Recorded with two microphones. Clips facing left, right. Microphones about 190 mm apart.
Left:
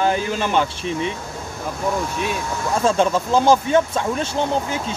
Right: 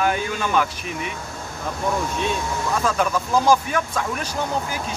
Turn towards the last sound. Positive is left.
turn(degrees=25)  # may be behind; listen again after turning